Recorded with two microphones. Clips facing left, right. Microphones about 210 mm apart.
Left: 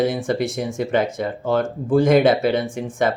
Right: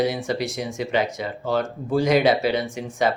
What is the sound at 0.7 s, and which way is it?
Speech, 50° left (ahead or behind).